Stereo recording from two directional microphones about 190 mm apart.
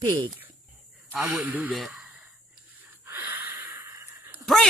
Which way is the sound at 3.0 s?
10° right (ahead or behind).